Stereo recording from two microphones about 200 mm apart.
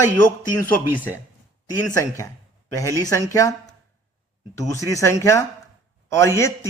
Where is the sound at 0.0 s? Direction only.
10° left (ahead or behind).